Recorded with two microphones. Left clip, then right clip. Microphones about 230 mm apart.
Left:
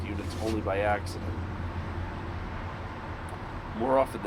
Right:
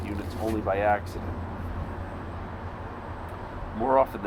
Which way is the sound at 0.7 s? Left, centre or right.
Centre.